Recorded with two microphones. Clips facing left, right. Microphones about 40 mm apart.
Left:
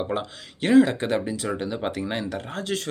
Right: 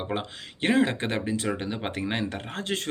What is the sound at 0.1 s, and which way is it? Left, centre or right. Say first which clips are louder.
Speech: left 3 dB; right.